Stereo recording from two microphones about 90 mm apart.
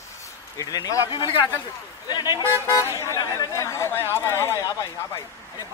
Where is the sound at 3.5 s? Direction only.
30° left (ahead or behind).